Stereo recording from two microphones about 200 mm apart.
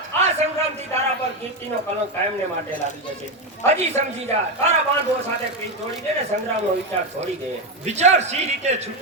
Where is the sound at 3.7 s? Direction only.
35° right (ahead or behind).